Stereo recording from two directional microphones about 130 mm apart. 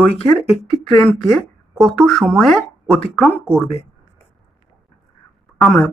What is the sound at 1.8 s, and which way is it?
Speech, 5° left (ahead or behind).